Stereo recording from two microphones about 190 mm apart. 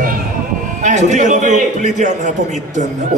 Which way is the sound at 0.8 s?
40° right (ahead or behind).